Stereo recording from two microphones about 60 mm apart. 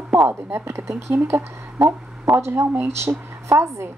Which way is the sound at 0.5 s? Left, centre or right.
Right.